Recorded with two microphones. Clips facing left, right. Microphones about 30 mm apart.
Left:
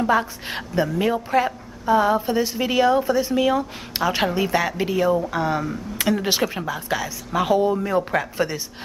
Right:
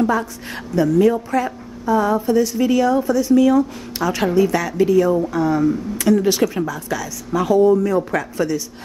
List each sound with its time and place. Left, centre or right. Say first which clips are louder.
0.1 s a woman's voice: left 1 dB; left